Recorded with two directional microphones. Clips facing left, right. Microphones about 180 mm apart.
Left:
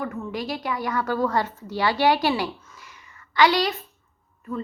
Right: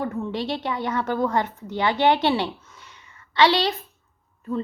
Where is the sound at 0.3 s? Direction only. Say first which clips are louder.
Right 2 dB; 30° right (ahead or behind).